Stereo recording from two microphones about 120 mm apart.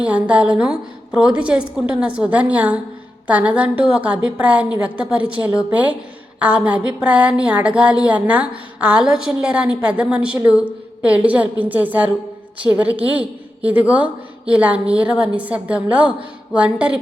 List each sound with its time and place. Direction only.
0.0 s a woman's voice: 10° right (ahead or behind)